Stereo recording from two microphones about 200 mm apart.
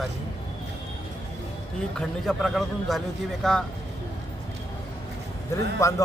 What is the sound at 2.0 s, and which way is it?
A man's voice, centre (ahead or behind).